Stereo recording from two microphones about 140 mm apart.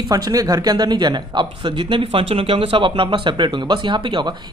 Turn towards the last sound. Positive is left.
turn(degrees=-35)  # may be behind; listen again after turning